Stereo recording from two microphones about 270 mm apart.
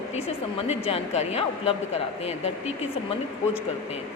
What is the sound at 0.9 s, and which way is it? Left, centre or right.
Speech, left.